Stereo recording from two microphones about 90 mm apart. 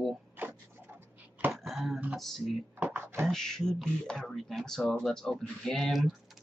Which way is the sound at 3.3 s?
5° left (ahead or behind).